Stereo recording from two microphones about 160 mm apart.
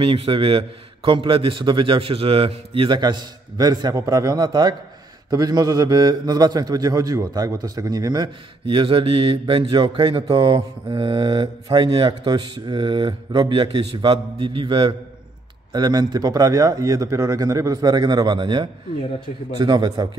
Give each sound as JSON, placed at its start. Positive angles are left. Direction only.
{"t": 0.0, "sound": "a man's voice", "side_deg": -35}